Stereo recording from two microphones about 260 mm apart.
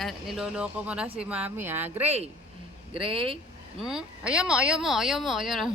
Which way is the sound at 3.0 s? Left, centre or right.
Centre.